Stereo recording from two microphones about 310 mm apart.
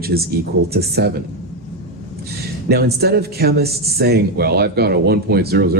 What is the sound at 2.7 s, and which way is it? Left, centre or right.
A man's voice, right.